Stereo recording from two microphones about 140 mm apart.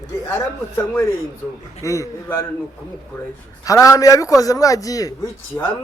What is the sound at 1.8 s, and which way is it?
Speech, 20° left (ahead or behind).